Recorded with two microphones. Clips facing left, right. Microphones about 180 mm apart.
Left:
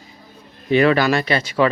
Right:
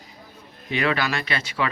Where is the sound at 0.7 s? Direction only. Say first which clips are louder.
Left 9 dB; 40° left (ahead or behind).